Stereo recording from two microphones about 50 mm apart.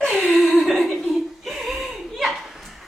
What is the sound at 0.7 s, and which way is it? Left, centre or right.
Chuckle, centre.